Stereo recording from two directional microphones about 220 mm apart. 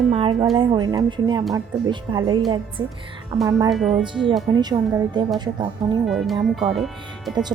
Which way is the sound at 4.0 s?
20° right (ahead or behind).